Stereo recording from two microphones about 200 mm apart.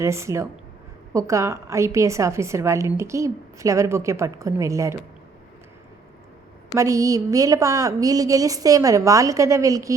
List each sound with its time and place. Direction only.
0.0 s a woman's voice: 15° right (ahead or behind)
6.7 s a woman's voice: 15° right (ahead or behind)